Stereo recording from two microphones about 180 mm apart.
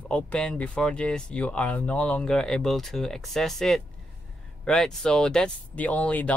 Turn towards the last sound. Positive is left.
turn(degrees=5)  # may be behind; listen again after turning